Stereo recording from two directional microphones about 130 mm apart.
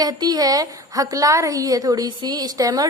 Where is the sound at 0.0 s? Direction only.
30° right (ahead or behind).